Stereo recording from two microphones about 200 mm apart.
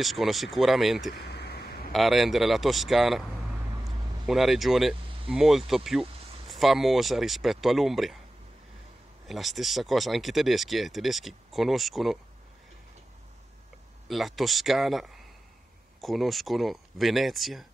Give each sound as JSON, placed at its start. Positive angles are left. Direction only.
{"t": 0.0, "sound": "speech", "side_deg": 0}
{"t": 1.1, "sound": "a sound", "side_deg": 55}
{"t": 1.9, "sound": "speech", "side_deg": 0}
{"t": 3.8, "sound": "vehicle", "side_deg": 0}
{"t": 5.3, "sound": "speech", "side_deg": 0}
{"t": 9.3, "sound": "speech", "side_deg": 0}
{"t": 14.0, "sound": "speech", "side_deg": 0}